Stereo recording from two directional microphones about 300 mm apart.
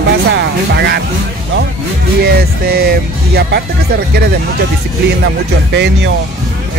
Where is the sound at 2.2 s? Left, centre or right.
Right.